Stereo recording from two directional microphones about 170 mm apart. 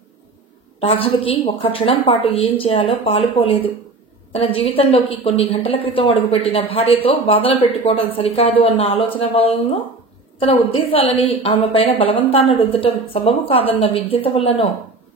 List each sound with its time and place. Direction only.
0.7 s a woman's voice: 35° left (ahead or behind)